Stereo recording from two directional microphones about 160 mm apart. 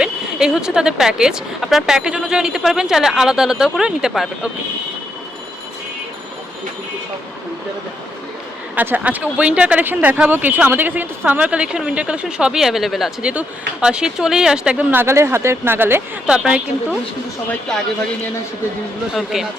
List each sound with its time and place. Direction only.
0.0 s a woman's voice: 5° right (ahead or behind)
8.7 s a woman's voice: 10° right (ahead or behind)
19.1 s a woman's voice: centre (ahead or behind)